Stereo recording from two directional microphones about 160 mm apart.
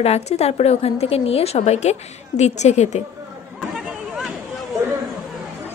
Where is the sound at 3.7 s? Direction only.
Centre (ahead or behind).